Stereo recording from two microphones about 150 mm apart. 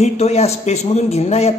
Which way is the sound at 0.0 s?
45° left (ahead or behind).